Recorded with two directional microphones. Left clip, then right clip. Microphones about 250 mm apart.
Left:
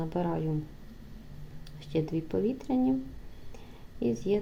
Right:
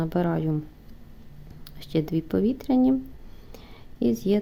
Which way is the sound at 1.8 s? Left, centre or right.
Right.